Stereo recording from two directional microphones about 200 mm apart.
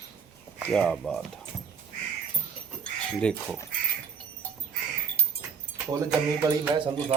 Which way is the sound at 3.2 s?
5° left (ahead or behind).